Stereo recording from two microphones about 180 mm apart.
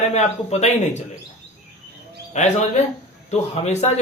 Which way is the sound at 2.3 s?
40° left (ahead or behind).